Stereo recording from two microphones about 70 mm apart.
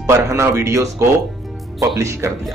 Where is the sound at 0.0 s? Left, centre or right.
Right.